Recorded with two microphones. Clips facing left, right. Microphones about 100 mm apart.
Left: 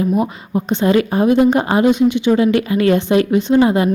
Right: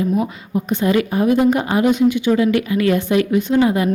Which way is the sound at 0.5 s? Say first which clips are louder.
Left 2 dB; 25° left (ahead or behind).